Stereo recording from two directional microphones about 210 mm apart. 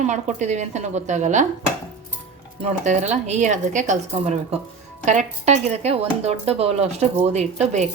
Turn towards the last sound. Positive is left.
turn(degrees=-35)  # may be behind; listen again after turning